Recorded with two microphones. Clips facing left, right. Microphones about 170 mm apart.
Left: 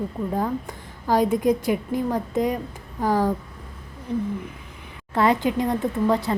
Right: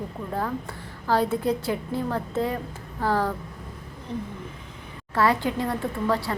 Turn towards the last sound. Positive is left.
turn(degrees=20)  # may be behind; listen again after turning